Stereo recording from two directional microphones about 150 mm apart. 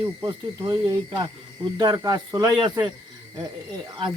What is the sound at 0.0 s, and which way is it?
Speech, 30° right (ahead or behind).